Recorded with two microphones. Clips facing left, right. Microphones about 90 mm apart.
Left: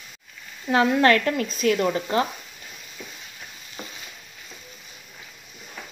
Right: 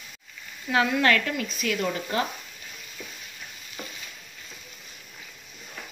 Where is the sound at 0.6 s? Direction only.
35° left (ahead or behind).